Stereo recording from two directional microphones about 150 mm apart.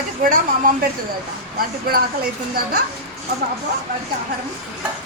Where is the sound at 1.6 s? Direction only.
85° right.